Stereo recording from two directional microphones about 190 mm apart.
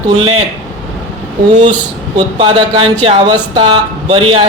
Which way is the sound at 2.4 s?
30° right (ahead or behind).